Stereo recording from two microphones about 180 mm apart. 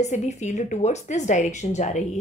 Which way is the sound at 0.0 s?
40° left (ahead or behind).